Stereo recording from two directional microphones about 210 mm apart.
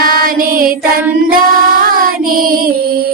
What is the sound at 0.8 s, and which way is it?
Child singing, 5° right (ahead or behind).